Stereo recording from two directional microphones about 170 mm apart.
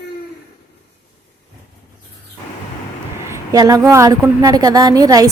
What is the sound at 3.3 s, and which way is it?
A woman's voice, 20° right (ahead or behind).